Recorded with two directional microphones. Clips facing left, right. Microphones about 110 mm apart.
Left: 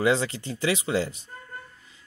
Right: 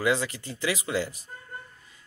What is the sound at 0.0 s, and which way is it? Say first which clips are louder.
Speech: left 3 dB; 30° left (ahead or behind).